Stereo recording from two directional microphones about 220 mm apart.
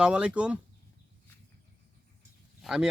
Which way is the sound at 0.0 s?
5° right (ahead or behind).